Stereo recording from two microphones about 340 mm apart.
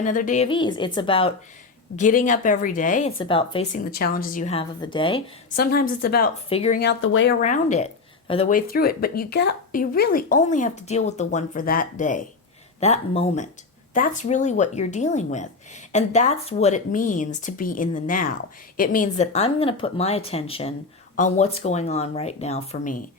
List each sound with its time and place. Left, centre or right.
0.0 s speech: left
5.5 s speech: left
7.4 s speech: left